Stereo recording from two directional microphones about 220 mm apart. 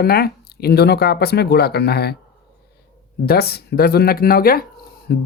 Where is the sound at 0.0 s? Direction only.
45° left (ahead or behind).